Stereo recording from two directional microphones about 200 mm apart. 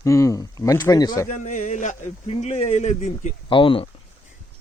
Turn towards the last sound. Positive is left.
turn(degrees=25)  # may be behind; listen again after turning